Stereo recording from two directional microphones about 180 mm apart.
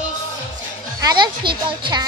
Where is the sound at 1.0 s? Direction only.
25° right (ahead or behind).